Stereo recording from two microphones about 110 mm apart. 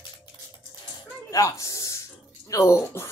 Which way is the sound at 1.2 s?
30° left (ahead or behind).